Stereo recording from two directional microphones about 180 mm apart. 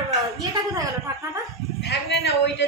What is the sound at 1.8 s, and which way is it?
Speech, 70° left (ahead or behind).